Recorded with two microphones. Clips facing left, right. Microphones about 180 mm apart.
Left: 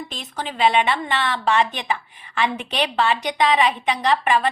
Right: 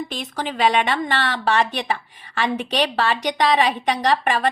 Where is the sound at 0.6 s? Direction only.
40° right (ahead or behind).